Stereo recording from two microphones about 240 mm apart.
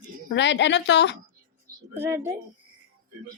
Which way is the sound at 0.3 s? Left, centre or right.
Left.